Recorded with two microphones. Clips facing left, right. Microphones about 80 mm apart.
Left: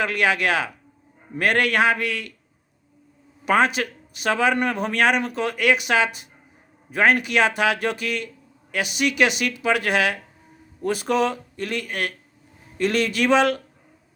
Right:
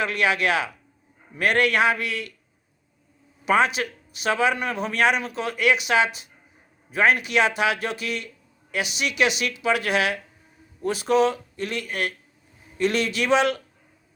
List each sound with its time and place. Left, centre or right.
0.0 s speech: left
3.4 s speech: left